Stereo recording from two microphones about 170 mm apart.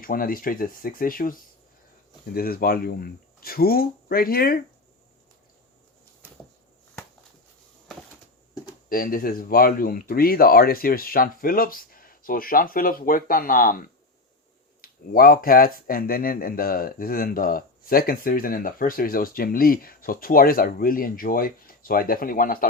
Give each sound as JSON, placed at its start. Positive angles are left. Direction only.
{"t": 0.0, "sound": "speech", "side_deg": 55}
{"t": 8.9, "sound": "speech", "side_deg": 55}